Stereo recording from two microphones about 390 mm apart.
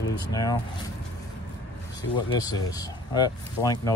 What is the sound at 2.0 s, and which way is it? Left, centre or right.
Speech, centre.